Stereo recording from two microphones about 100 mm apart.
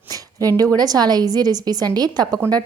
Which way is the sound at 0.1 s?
35° right (ahead or behind).